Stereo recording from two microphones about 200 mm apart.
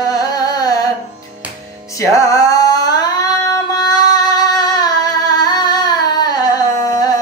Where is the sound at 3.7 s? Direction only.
20° left (ahead or behind).